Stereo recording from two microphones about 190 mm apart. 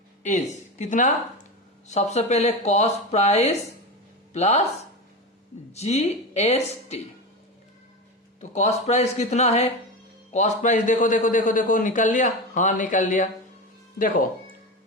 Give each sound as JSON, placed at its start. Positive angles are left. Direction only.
{"t": 0.2, "sound": "speech", "side_deg": 40}
{"t": 5.7, "sound": "speech", "side_deg": 35}
{"t": 8.4, "sound": "a man's voice", "side_deg": 35}